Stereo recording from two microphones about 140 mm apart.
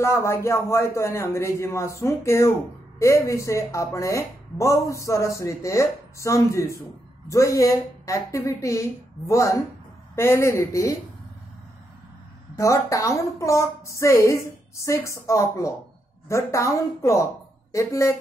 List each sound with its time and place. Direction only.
0.0 s speech: 20° left (ahead or behind)
12.5 s speech: 20° left (ahead or behind)